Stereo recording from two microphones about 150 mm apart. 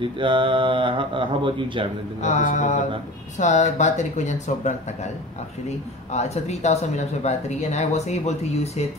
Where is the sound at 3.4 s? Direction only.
50° left (ahead or behind).